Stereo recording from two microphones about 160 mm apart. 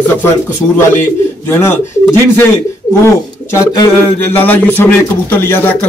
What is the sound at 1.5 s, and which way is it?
Speech, 15° left (ahead or behind).